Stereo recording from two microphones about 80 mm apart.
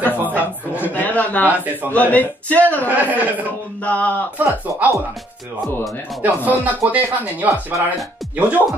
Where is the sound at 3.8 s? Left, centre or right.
Centre.